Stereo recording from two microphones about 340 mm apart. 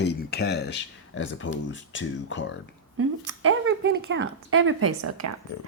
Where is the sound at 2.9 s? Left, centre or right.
Right.